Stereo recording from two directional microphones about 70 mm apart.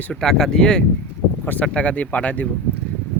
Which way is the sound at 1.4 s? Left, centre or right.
Left.